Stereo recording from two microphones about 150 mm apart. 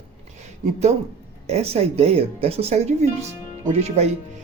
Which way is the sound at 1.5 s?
45° right (ahead or behind).